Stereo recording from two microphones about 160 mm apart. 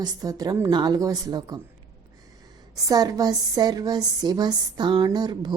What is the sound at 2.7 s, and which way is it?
A woman's voice, 25° right (ahead or behind).